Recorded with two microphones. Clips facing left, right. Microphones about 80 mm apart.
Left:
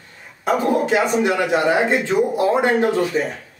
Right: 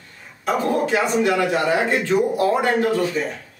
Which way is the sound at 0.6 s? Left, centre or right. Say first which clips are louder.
Left 2 dB; centre.